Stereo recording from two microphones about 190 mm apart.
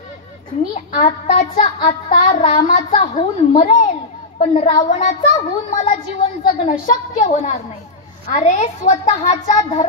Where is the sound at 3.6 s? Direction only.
40° left (ahead or behind).